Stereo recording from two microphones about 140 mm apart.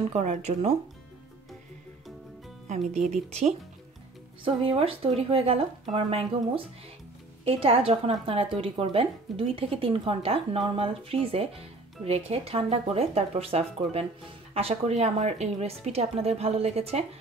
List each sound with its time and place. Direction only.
0.1 s speech: 55° right (ahead or behind)
3.1 s a woman's voice: 50° right (ahead or behind)